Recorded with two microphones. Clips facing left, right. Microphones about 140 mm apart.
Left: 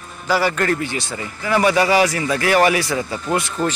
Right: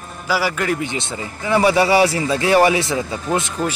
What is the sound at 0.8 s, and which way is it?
Speech, 20° right (ahead or behind).